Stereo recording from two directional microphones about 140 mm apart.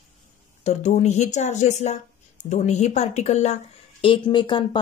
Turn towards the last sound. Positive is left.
turn(degrees=35)  # may be behind; listen again after turning